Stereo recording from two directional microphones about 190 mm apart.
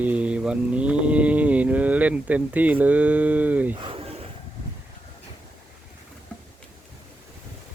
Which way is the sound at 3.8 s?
30° right (ahead or behind).